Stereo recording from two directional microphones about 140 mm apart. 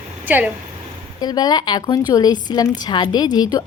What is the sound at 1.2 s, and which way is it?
A woman's voice, 30° left (ahead or behind).